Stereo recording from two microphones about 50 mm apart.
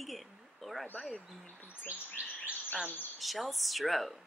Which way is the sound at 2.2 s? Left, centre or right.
Right.